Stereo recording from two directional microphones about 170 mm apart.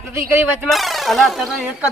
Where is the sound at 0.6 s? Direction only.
Centre (ahead or behind).